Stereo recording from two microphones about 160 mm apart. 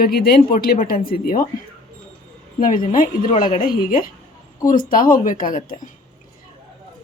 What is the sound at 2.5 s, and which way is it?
A woman's voice, 55° left (ahead or behind).